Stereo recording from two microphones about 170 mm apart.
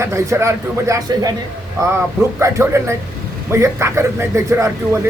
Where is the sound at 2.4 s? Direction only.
15° right (ahead or behind).